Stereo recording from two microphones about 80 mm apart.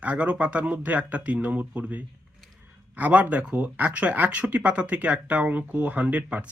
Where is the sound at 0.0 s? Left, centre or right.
Centre.